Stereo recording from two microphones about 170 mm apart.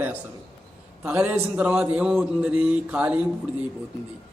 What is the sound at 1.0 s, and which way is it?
Speech, 10° right (ahead or behind).